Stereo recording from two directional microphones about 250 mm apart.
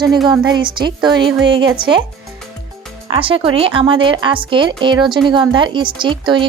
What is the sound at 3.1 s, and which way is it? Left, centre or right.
Speech, right.